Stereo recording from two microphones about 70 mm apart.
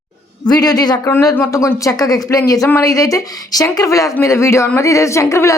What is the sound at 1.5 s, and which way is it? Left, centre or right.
Speech, left.